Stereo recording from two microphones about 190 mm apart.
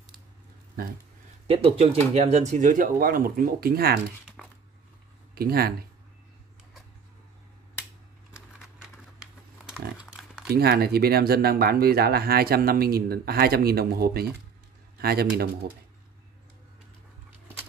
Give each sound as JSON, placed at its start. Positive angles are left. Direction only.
{"t": 1.5, "sound": "speech", "side_deg": -30}
{"t": 4.4, "sound": "a sound", "side_deg": 0}
{"t": 5.3, "sound": "speech", "side_deg": -55}
{"t": 9.2, "sound": "typing", "side_deg": -5}
{"t": 10.5, "sound": "speech", "side_deg": -55}